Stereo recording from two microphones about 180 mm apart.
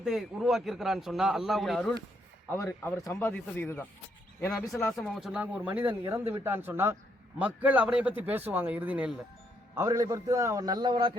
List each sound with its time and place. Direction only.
0.0 s a man's voice: centre (ahead or behind)
2.5 s speech: 15° left (ahead or behind)
4.7 s a man's voice: centre (ahead or behind); by 11.2 s 25° right (ahead or behind)